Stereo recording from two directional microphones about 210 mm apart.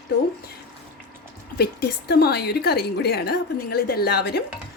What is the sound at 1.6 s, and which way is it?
A woman's voice, 50° left (ahead or behind).